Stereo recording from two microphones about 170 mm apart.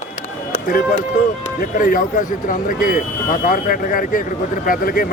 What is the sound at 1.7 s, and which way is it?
Speech, 50° left (ahead or behind).